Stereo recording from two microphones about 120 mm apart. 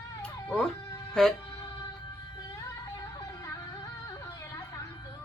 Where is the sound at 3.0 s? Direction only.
35° left (ahead or behind).